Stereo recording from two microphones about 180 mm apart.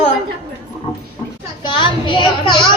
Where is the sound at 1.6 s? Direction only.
25° left (ahead or behind).